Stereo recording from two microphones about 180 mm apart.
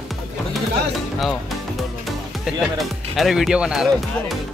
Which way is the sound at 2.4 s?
Centre (ahead or behind).